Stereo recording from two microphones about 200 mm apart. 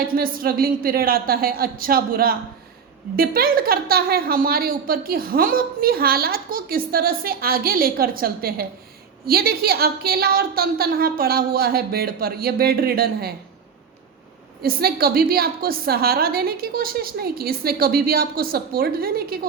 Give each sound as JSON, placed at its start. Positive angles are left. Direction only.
{"t": 0.1, "sound": "a woman's voice", "side_deg": -45}
{"t": 14.6, "sound": "a woman's voice", "side_deg": -50}